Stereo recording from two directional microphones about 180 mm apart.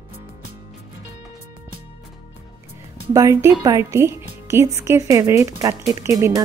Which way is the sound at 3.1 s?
15° right (ahead or behind).